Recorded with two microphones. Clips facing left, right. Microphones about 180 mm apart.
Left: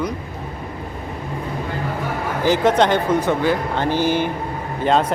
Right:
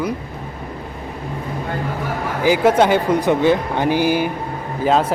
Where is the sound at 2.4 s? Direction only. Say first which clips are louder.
Right 2 dB; 10° right (ahead or behind).